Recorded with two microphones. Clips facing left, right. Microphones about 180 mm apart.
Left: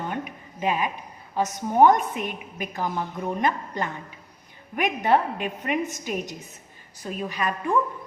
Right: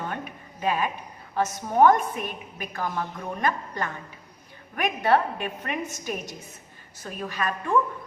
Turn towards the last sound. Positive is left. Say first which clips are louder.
# left 1 dB
turn(degrees=15)  # may be behind; listen again after turning